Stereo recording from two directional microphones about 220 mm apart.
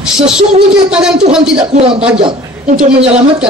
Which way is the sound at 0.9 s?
5° right (ahead or behind).